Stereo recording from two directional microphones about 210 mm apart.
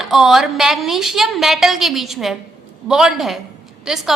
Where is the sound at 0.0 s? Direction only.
Centre (ahead or behind).